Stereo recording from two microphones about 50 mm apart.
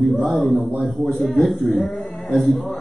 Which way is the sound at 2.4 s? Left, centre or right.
Centre.